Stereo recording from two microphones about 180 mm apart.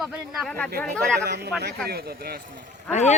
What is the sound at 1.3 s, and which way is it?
Speech, 65° right (ahead or behind).